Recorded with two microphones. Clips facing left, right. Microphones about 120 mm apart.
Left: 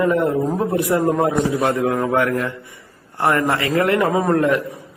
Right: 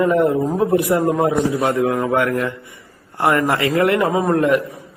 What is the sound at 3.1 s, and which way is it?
A man's voice, 20° right (ahead or behind).